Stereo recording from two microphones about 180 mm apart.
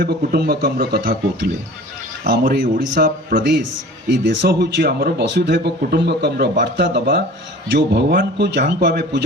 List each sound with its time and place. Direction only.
0.0 s speech: 60° right (ahead or behind)
4.1 s speech: 70° right (ahead or behind)